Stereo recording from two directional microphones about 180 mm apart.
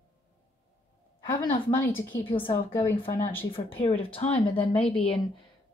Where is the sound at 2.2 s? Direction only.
30° left (ahead or behind).